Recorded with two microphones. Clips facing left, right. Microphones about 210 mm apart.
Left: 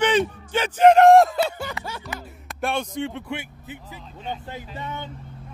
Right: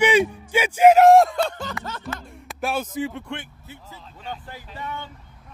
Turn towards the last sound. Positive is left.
turn(degrees=20)  # may be behind; listen again after turning